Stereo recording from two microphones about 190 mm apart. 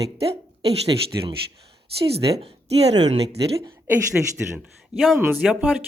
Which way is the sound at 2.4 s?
35° right (ahead or behind).